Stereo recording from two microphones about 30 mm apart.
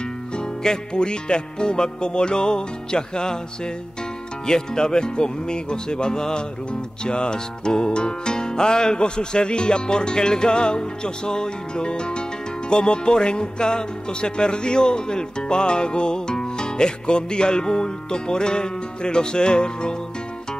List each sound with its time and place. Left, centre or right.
0.7 s speech: left
4.5 s speech: left